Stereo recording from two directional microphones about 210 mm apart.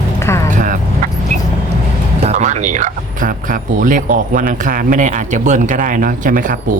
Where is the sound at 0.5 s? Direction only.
40° right (ahead or behind).